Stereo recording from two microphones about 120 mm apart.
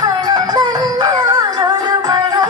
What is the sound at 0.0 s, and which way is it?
Music, 35° right (ahead or behind).